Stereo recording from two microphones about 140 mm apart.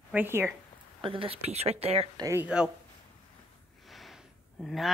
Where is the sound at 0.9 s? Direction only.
40° right (ahead or behind).